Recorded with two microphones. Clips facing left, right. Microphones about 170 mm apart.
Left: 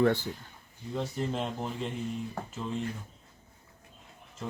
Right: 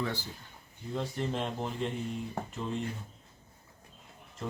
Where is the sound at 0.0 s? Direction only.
55° left (ahead or behind).